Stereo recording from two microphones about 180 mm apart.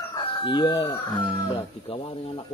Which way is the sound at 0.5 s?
25° left (ahead or behind).